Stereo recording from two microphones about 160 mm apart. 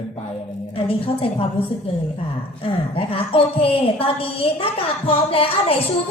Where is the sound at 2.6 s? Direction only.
35° left (ahead or behind).